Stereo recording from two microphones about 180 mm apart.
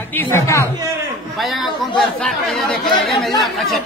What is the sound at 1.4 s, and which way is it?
Speech, centre (ahead or behind).